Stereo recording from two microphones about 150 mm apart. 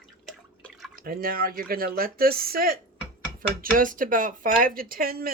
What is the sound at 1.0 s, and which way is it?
Speech, 80° right.